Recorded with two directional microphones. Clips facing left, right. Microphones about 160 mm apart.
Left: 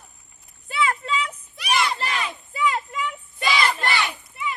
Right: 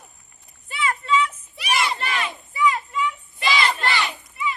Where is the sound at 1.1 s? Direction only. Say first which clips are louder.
Right 5 dB; 35° left (ahead or behind).